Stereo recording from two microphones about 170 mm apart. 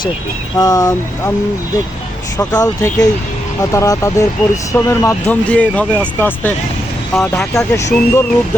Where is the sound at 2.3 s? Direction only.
20° left (ahead or behind).